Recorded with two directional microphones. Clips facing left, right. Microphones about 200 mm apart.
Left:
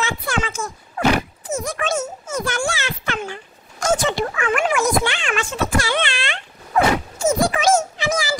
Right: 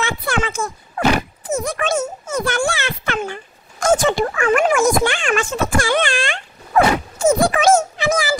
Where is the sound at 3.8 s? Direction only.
50° right (ahead or behind).